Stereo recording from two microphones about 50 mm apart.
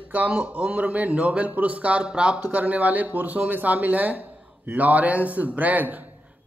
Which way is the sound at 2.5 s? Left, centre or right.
Right.